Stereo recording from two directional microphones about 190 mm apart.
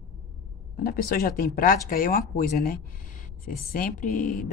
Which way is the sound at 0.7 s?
50° left (ahead or behind).